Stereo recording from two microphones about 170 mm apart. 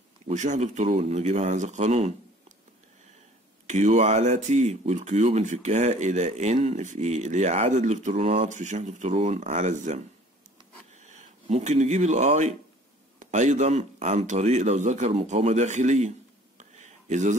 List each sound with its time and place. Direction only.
0.2 s speech: 45° right (ahead or behind)
3.6 s speech: 45° right (ahead or behind)
16.5 s a sound: 45° right (ahead or behind)